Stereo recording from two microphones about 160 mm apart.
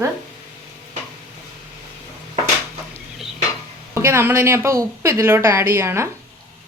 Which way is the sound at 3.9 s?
15° right (ahead or behind).